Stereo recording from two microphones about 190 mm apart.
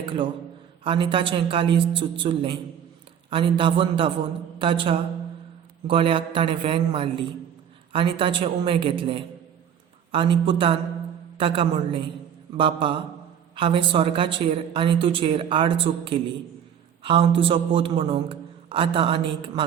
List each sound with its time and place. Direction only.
0.9 s a man's voice: 25° right (ahead or behind)